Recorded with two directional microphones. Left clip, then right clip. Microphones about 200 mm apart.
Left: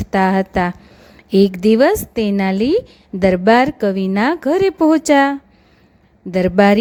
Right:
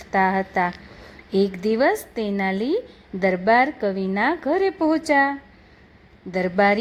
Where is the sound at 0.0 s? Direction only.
50° left (ahead or behind).